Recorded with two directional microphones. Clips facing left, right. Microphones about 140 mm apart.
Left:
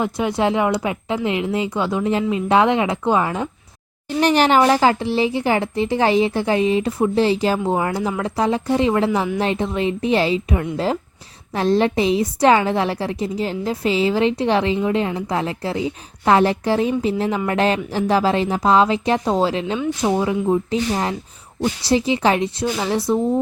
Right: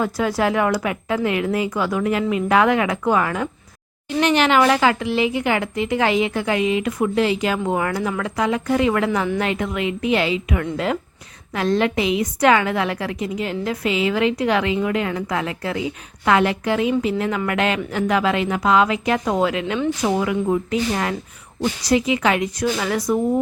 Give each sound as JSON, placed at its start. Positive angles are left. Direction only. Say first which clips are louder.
{"t": 0.0, "sound": "speech", "louder": "left 1 dB", "side_deg": 20}
{"t": 4.2, "sound": "a woman's voice", "louder": "left 2 dB", "side_deg": 35}